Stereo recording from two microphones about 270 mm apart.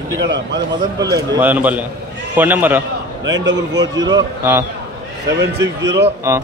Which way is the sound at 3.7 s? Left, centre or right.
Centre.